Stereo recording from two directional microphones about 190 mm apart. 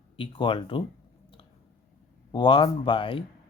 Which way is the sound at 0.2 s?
25° left (ahead or behind).